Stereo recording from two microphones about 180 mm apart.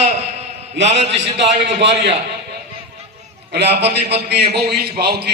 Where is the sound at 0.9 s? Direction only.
75° right (ahead or behind).